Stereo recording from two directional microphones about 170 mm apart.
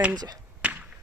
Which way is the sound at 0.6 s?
10° right (ahead or behind).